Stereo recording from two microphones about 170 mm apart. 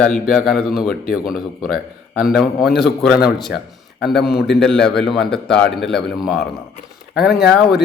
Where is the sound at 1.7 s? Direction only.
60° left (ahead or behind).